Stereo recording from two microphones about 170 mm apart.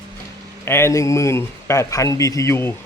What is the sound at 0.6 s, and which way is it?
Speech, 15° left (ahead or behind).